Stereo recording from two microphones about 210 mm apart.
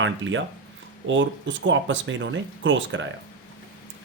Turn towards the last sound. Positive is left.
turn(degrees=-65)  # may be behind; listen again after turning